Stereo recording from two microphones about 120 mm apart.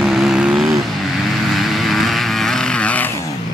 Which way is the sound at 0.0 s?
5° right (ahead or behind).